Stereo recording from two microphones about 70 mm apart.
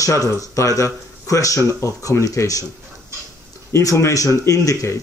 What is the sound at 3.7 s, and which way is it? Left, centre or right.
Speech, left.